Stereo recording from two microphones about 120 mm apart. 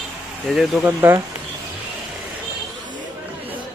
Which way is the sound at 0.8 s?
20° right (ahead or behind).